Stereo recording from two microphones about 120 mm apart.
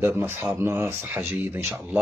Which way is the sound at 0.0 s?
20° right (ahead or behind).